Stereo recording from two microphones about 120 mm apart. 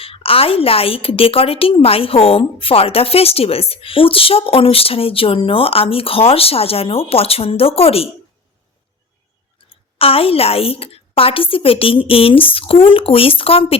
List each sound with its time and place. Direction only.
0.0 s a woman's voice: 50° left (ahead or behind)
9.6 s a sound: 50° left (ahead or behind)
10.0 s a woman's voice: 50° left (ahead or behind)